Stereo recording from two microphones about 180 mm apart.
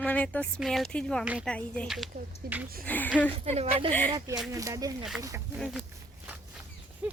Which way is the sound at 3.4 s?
35° right (ahead or behind).